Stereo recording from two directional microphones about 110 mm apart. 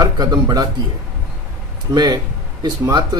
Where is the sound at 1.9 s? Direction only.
40° right (ahead or behind).